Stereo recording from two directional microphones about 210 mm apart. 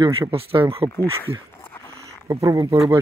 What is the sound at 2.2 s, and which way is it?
Speech, 15° right (ahead or behind).